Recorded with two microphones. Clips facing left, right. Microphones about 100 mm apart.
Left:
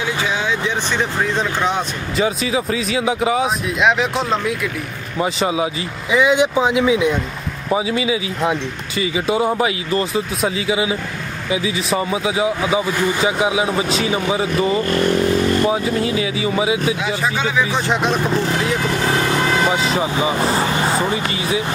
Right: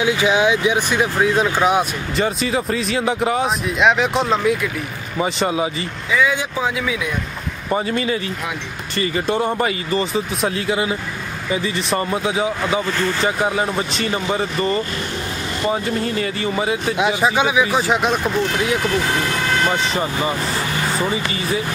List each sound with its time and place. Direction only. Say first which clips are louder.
0.0 s speech: right 5 dB; 15° right (ahead or behind); by 5.9 s centre (ahead or behind)
6.1 s speech: left 5 dB; 20° left (ahead or behind)
7.7 s speech: left 1 dB; 5° left (ahead or behind)
17.0 s speech: right 3 dB; 15° right (ahead or behind)
17.6 s speech: right 1 dB; 5° right (ahead or behind)
19.6 s speech: left 2 dB; 5° left (ahead or behind)